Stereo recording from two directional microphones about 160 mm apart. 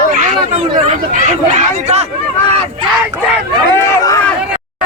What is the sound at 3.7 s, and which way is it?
Run, 20° left (ahead or behind).